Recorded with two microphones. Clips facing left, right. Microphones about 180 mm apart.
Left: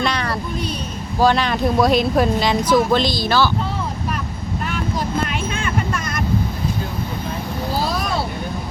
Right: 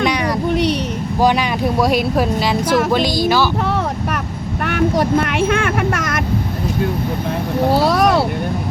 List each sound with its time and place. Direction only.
0.5 s a sound: 75° right (ahead or behind)
1.2 s speech: 15° right (ahead or behind)
4.6 s speech: 70° right (ahead or behind); by 6.1 s 90° right
7.7 s vehicle: 75° right (ahead or behind)